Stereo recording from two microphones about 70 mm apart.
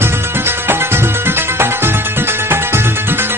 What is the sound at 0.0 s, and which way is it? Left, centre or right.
Music, right.